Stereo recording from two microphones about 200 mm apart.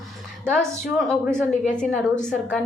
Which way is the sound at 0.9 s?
Centre (ahead or behind).